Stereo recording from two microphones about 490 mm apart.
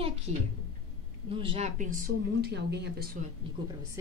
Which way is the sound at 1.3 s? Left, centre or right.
Centre.